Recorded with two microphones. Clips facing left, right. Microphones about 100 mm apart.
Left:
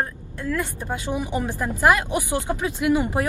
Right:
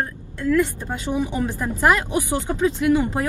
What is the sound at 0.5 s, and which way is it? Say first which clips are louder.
Speech: right 7 dB; 15° left (ahead or behind).